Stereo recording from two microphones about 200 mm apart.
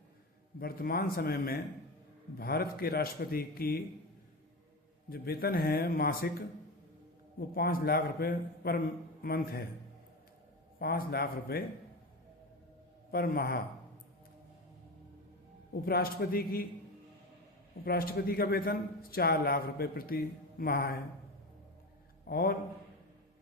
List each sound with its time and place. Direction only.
0.6 s a man's voice: 50° left (ahead or behind)
5.0 s a man's voice: 50° left (ahead or behind)
7.3 s a man's voice: 50° left (ahead or behind)
10.8 s a man's voice: 50° left (ahead or behind)
13.1 s a man's voice: 50° left (ahead or behind)
15.7 s a man's voice: 50° left (ahead or behind)
17.8 s a man's voice: 50° left (ahead or behind)
22.3 s a man's voice: 50° left (ahead or behind)